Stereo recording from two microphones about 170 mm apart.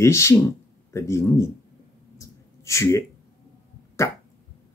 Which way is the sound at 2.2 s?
15° left (ahead or behind).